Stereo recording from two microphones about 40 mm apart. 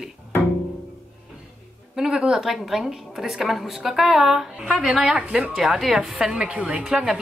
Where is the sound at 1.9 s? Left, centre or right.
Centre.